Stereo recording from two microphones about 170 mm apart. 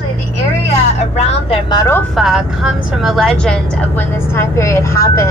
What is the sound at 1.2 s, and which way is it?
Speech, 35° left (ahead or behind).